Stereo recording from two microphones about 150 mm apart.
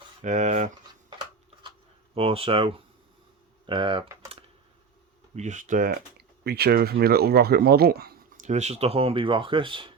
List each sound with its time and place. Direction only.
0.2 s speech: 55° right (ahead or behind)
2.1 s speech: 40° right (ahead or behind)
5.3 s speech: 50° right (ahead or behind); by 8.4 s 90° right
8.4 s speech: 50° right (ahead or behind); by 9.9 s 35° right (ahead or behind)